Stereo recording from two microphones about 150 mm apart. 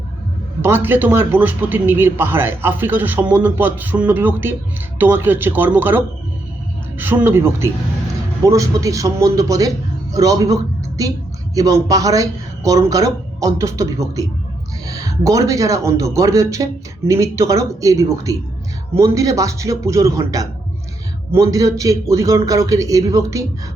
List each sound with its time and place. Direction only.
0.6 s speech: 15° right (ahead or behind)
7.0 s speech: 15° right (ahead or behind)